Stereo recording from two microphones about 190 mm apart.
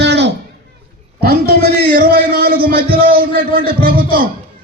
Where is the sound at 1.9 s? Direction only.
50° right (ahead or behind).